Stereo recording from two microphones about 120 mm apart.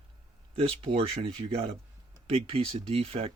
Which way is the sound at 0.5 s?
55° right (ahead or behind).